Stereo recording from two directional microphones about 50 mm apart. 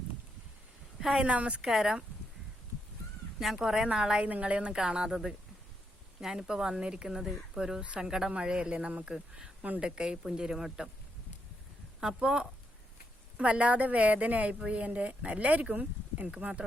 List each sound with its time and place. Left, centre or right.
0.9 s a sound: centre
1.2 s speech: right
1.6 s speech: centre
3.4 s speech: centre
4.3 s speech: right
6.1 s speech: centre
9.0 s speech: centre
11.9 s speech: centre